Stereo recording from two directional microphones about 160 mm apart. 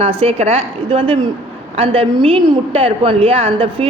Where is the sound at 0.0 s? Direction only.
40° right (ahead or behind).